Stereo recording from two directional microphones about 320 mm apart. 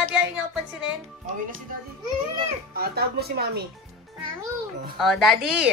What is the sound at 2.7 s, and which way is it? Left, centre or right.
Speech, right.